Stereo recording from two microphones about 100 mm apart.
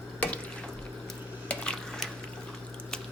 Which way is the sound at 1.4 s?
10° left (ahead or behind).